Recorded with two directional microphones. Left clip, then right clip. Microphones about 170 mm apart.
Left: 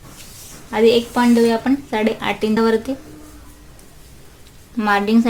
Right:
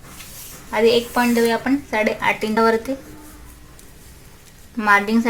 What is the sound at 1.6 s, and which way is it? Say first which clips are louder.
Speech: left 1 dB; 35° left (ahead or behind).